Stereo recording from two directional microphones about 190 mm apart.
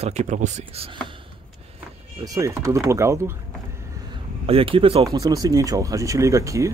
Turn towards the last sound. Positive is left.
turn(degrees=-15)  # may be behind; listen again after turning